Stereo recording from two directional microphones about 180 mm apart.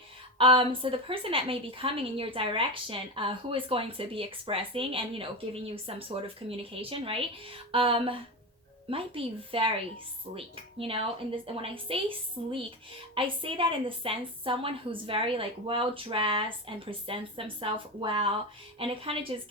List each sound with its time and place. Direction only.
0.3 s a woman's voice: 30° right (ahead or behind)